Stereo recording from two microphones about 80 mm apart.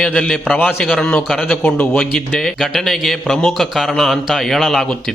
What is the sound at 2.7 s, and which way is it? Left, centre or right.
A man's voice, centre.